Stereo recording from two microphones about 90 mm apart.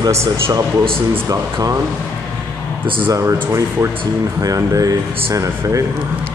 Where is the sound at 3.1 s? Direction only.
35° right (ahead or behind).